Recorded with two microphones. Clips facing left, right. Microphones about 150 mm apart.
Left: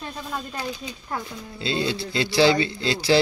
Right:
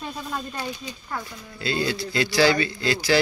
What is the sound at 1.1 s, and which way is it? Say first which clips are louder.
A man's voice: left 3 dB; 25° left (ahead or behind).